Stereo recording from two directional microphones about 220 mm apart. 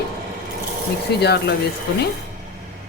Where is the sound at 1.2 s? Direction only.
50° left (ahead or behind).